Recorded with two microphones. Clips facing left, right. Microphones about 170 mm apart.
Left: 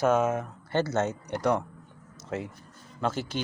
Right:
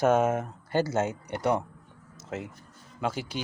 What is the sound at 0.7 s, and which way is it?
Speech, 10° right (ahead or behind).